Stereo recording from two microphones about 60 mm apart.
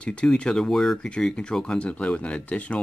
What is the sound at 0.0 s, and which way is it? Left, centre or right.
Speech, centre.